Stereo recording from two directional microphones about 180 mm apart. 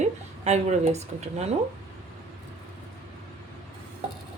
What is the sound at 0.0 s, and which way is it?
Speech, 40° right (ahead or behind).